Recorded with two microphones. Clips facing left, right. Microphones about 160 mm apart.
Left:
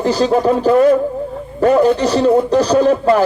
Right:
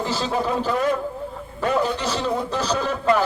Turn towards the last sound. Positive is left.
turn(degrees=40)  # may be behind; listen again after turning